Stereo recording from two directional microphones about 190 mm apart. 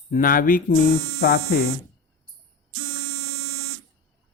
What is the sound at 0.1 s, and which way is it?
Speech, 45° left (ahead or behind).